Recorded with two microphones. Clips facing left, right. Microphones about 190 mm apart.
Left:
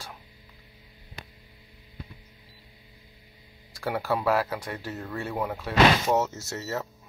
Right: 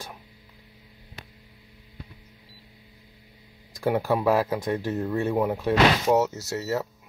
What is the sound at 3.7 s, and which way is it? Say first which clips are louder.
Speech: right 5 dB; 15° right (ahead or behind).